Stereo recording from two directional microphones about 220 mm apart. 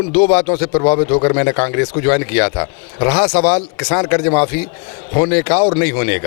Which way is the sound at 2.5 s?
25° left (ahead or behind).